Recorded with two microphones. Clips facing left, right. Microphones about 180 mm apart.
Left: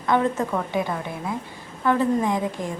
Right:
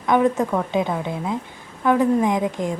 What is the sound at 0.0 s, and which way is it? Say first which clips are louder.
A woman's voice: right 4 dB; 15° right (ahead or behind).